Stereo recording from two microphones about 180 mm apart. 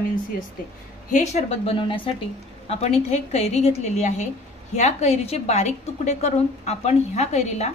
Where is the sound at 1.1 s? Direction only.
40° left (ahead or behind).